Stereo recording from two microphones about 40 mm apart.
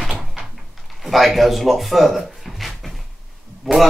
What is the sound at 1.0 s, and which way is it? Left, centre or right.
Speech, centre.